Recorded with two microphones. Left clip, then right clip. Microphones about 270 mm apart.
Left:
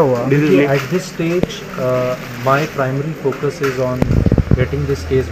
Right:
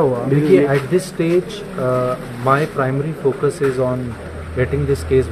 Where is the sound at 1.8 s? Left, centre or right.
Centre.